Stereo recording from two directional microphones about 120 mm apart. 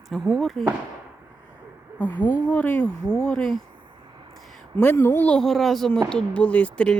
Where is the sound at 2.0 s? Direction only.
15° left (ahead or behind).